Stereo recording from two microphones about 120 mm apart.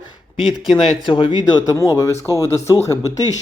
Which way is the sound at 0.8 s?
45° left (ahead or behind).